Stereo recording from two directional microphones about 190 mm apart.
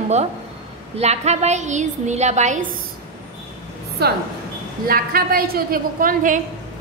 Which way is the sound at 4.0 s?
60° right (ahead or behind).